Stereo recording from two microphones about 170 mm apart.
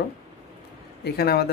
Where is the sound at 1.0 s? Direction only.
70° left (ahead or behind).